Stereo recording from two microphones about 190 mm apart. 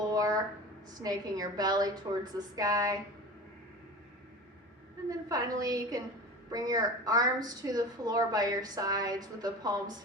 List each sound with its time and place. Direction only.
0.0 s a sound: 20° right (ahead or behind)
0.9 s a woman's voice: 20° right (ahead or behind)
5.0 s a woman's voice: 20° right (ahead or behind)